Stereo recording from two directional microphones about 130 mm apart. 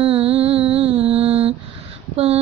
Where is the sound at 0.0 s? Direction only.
45° right (ahead or behind).